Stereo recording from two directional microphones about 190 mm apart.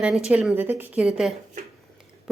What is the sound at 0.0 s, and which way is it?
A woman's voice, 5° right (ahead or behind).